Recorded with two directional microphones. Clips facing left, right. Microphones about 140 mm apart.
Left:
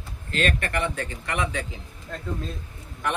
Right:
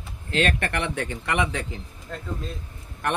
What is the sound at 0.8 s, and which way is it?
Speech, 65° right (ahead or behind).